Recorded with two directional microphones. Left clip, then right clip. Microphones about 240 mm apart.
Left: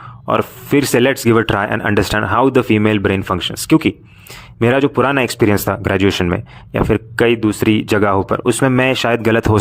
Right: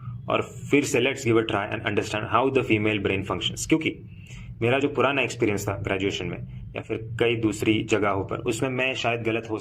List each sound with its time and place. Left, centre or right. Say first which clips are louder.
0.3 s speech: left 8 dB; left